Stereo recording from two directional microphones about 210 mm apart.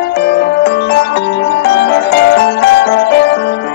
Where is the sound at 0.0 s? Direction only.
50° left (ahead or behind).